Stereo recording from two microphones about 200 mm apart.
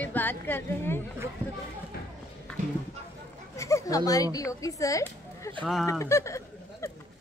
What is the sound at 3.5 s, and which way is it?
Speech, 15° left (ahead or behind).